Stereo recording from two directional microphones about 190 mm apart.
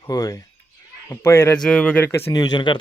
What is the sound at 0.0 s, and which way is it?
Speech, 20° left (ahead or behind).